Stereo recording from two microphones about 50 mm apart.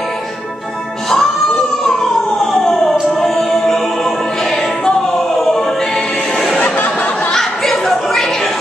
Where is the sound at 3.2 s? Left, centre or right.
Centre.